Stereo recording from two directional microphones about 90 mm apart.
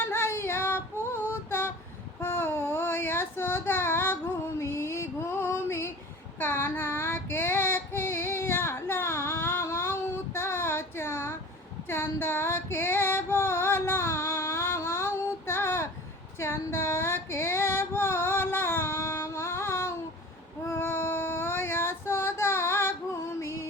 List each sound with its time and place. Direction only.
0.0 s female singing: 25° left (ahead or behind)
2.2 s child singing: 25° left (ahead or behind)
4.6 s a sound: 30° left (ahead or behind)
6.4 s child singing: 25° left (ahead or behind)
11.9 s female singing: 25° left (ahead or behind)
20.7 s child singing: 25° left (ahead or behind)